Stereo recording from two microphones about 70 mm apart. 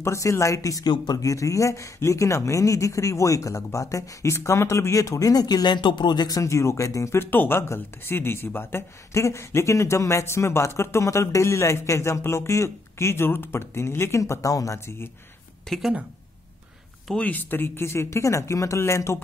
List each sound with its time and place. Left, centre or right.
0.0 s speech: left
0.8 s speech: left
6.4 s speech: left
7.2 s speech: left
15.7 s speech: centre
17.2 s speech: left